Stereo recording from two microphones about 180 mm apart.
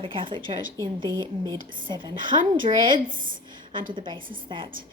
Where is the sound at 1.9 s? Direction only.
25° right (ahead or behind).